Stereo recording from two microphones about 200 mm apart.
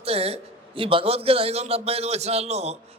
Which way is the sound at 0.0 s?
30° right (ahead or behind).